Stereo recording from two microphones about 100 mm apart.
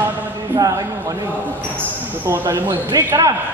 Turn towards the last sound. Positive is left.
turn(degrees=-40)  # may be behind; listen again after turning